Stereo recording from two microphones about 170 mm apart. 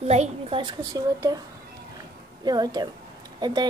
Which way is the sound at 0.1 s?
35° right (ahead or behind).